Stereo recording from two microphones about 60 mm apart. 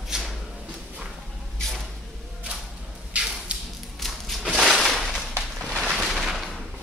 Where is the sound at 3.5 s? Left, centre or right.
Centre.